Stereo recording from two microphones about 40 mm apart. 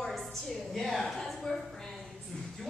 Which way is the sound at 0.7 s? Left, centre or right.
Centre.